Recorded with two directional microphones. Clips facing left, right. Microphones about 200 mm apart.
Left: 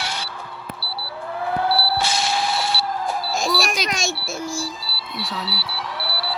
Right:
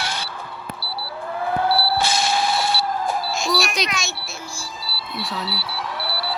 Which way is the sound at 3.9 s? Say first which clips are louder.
Left 4 dB; 50° left (ahead or behind).